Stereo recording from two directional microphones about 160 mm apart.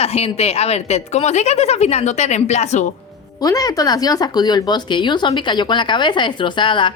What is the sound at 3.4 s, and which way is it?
Speech, 20° left (ahead or behind).